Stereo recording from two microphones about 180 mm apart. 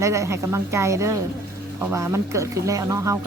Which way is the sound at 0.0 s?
15° right (ahead or behind).